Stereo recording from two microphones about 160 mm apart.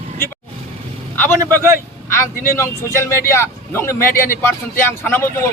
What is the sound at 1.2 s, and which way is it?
Speech, 15° left (ahead or behind).